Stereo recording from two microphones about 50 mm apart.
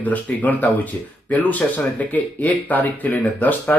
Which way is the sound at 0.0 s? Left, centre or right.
Left.